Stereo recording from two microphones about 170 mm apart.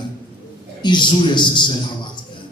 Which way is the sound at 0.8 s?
25° left (ahead or behind).